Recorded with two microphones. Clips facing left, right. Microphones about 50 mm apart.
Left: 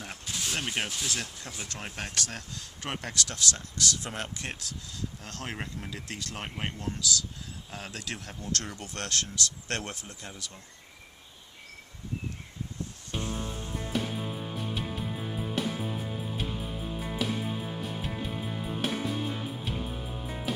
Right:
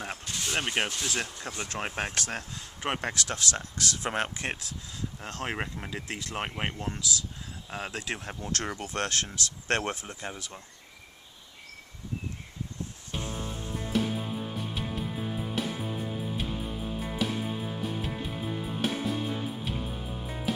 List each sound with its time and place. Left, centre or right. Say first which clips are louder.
0.3 s speech: right 1 dB; centre
1.6 s speech: right 6 dB; right
4.4 s speech: right 4 dB; right
13.3 s music: left 1 dB; centre
13.7 s music: right 3 dB; centre